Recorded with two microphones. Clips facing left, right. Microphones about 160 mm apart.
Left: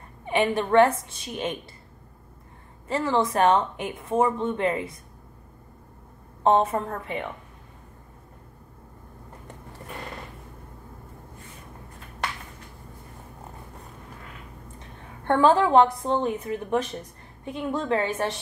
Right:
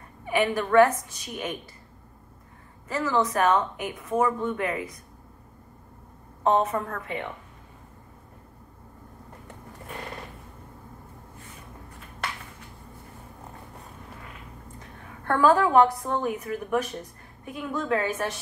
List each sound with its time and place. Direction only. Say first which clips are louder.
0.2 s speech: left 1 dB; 25° left (ahead or behind)
2.9 s speech: left 1 dB; 30° left (ahead or behind)
6.4 s speech: left 2 dB; 30° left (ahead or behind)
15.2 s speech: left 1 dB; 25° left (ahead or behind)